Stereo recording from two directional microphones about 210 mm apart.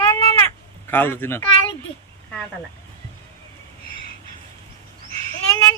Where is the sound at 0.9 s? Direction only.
10° left (ahead or behind).